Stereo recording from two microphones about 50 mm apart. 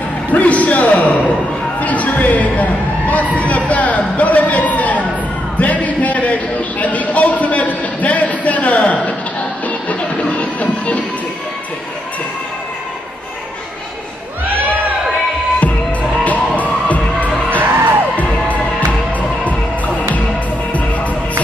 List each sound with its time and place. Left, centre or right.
0.3 s a sound: left
1.8 s a man's voice: left
5.6 s a sound: left
9.7 s music: left
15.6 s music: left
17.6 s music: right
18.1 s music: left